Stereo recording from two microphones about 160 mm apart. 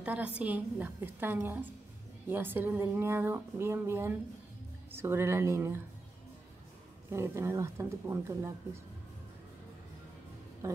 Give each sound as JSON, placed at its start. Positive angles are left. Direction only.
{"t": 0.0, "sound": "speech", "side_deg": -10}
{"t": 7.1, "sound": "speech", "side_deg": -15}